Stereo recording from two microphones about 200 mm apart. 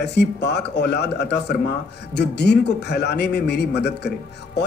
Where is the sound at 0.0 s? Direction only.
60° left (ahead or behind).